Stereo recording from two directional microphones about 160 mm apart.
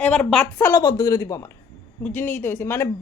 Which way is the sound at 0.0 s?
5° left (ahead or behind).